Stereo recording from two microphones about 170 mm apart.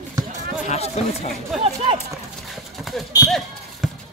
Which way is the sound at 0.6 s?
40° left (ahead or behind).